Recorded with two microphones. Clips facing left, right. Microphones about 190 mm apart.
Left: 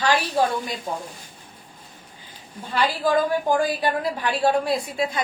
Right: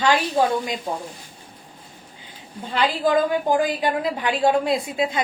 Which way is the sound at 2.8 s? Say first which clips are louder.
Right 1 dB; 20° right (ahead or behind).